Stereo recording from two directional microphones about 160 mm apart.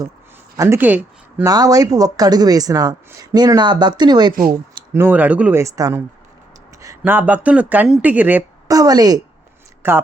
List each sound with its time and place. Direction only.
0.5 s speech: 20° right (ahead or behind)
1.5 s speech: 20° right (ahead or behind)
5.0 s speech: 10° right (ahead or behind)
8.7 s speech: 25° right (ahead or behind)
9.8 s speech: 15° right (ahead or behind)